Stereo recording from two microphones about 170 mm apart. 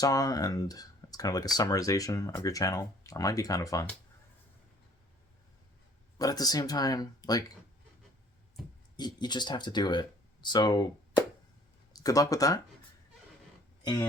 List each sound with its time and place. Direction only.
0.0 s speech: 20° left (ahead or behind)
6.1 s speech: 20° left (ahead or behind)
9.0 s speech: 25° left (ahead or behind)